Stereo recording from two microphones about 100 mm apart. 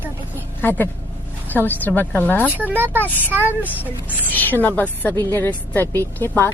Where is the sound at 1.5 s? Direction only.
20° left (ahead or behind).